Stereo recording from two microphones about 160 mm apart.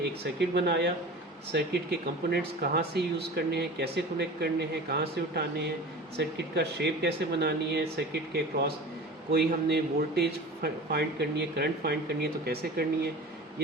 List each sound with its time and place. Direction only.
0.3 s speech: 90° right